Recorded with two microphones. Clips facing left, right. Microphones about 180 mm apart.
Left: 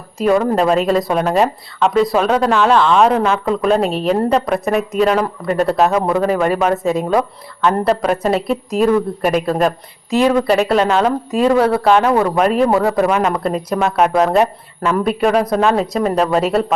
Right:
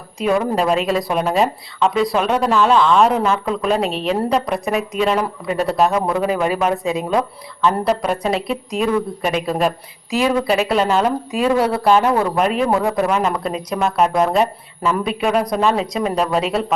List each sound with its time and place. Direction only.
0.2 s speech: centre (ahead or behind)
13.5 s speech: 55° left (ahead or behind)
13.7 s speech: centre (ahead or behind)